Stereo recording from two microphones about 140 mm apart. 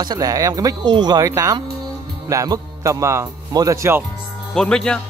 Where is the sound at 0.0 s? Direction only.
30° right (ahead or behind).